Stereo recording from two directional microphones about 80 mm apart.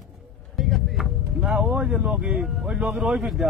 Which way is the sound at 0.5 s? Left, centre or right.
Centre.